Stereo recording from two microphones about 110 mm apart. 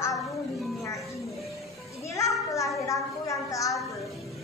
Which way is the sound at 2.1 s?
30° left (ahead or behind).